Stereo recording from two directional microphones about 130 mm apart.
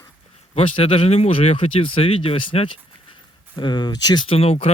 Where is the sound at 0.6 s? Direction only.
45° left (ahead or behind).